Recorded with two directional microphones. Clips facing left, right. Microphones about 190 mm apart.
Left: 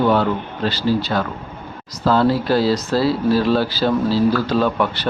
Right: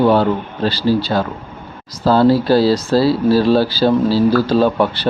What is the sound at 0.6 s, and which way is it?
Speech, 30° right (ahead or behind).